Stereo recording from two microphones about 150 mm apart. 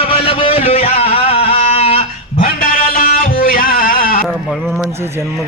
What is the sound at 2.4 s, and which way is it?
Music, 75° left (ahead or behind).